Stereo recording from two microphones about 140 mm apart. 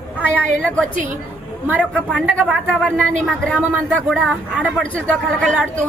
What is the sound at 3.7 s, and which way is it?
Speech, 5° right (ahead or behind).